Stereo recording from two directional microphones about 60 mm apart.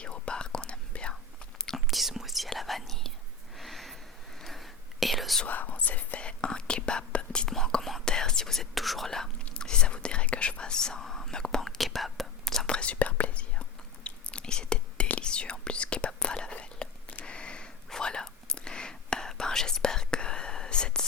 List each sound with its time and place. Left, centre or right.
0.0 s whispering: centre
1.9 s whispering: centre
3.6 s a sound: centre
4.4 s whispering: centre
5.5 s whispering: left
7.5 s whispering: centre
11.8 s whispering: centre